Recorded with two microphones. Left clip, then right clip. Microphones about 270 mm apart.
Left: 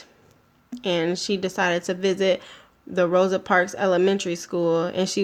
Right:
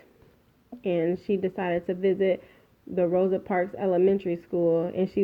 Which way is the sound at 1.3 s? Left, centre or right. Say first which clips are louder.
Left 2 dB; left.